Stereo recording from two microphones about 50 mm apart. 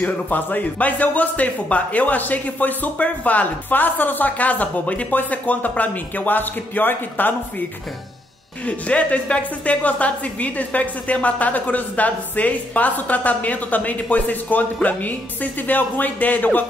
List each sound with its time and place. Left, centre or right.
0.0 s a woman's voice: left
8.6 s a woman's voice: left